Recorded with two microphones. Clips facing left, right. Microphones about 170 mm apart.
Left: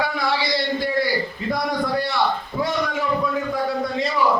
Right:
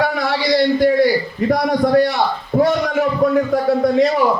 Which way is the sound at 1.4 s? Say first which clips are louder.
Right 8 dB; 60° right (ahead or behind).